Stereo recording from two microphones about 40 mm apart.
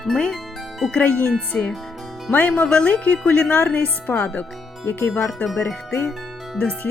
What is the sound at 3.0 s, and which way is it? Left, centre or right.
Speech, left.